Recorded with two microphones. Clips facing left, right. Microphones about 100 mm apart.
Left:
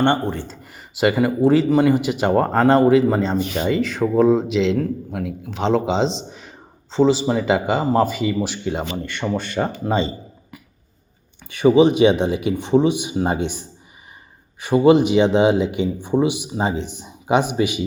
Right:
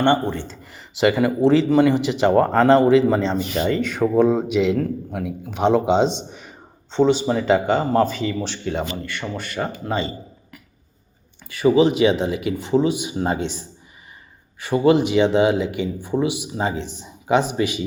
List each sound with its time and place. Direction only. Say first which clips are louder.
0.0 s a man's voice: even; 15° left (ahead or behind)
11.4 s speech: left 2 dB; 20° left (ahead or behind)